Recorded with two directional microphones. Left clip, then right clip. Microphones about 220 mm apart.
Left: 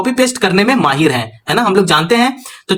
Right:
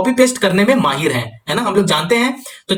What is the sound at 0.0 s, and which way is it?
Speech, 35° left (ahead or behind).